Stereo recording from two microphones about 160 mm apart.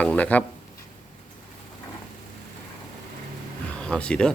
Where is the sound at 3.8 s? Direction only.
5° left (ahead or behind).